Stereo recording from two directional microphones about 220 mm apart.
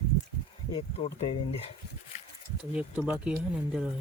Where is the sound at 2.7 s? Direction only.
5° right (ahead or behind).